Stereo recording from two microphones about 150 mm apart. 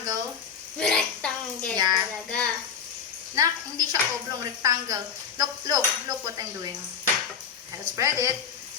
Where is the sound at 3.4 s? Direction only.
25° right (ahead or behind).